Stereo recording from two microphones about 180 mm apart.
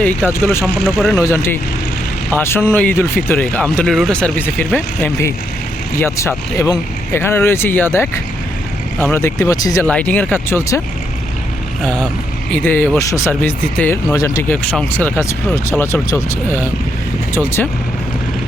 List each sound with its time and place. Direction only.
0.0 s speech: 10° left (ahead or behind)
0.6 s speech: centre (ahead or behind)
1.1 s speech: 15° left (ahead or behind)
9.8 s speech: 10° left (ahead or behind)
12.5 s speech: 10° left (ahead or behind)